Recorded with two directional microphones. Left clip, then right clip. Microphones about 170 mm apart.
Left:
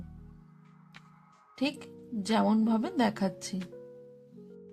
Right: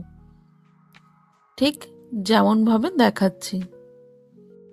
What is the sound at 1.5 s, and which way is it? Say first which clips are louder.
Speech: right 11 dB; 40° right (ahead or behind).